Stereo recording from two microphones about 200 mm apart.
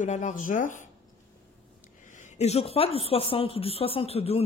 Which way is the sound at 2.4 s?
30° left (ahead or behind).